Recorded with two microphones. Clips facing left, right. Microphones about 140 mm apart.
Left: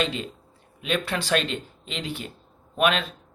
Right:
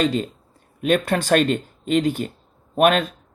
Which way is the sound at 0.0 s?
40° right (ahead or behind).